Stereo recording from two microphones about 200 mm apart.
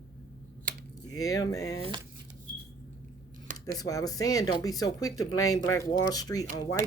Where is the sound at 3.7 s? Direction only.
20° left (ahead or behind).